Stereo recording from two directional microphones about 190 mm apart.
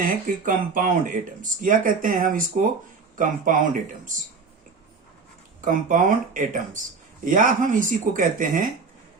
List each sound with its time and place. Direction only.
0.0 s speech: 45° right (ahead or behind)
5.6 s speech: 45° right (ahead or behind)